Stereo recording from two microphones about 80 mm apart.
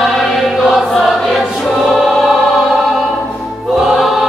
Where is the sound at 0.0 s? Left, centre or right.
Centre.